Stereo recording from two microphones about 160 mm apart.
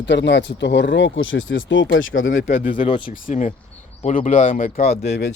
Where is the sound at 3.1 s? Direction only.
50° left (ahead or behind).